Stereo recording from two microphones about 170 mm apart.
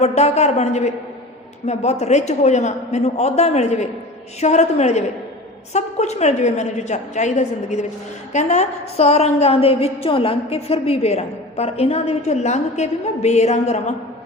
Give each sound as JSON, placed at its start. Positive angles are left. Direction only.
{"t": 0.0, "sound": "a woman's voice", "side_deg": 40}